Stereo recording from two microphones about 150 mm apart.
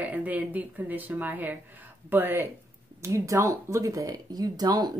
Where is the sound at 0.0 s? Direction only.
10° right (ahead or behind).